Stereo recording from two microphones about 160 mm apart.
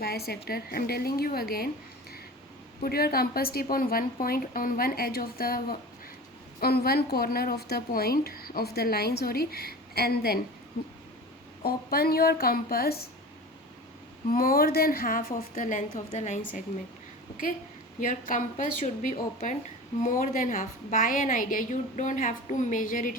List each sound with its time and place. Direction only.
0.0 s a woman's voice: 75° left (ahead or behind)
2.8 s a woman's voice: 70° left (ahead or behind)
11.6 s a woman's voice: 70° left (ahead or behind)
14.3 s a woman's voice: 65° left (ahead or behind)
18.0 s a woman's voice: 55° left (ahead or behind)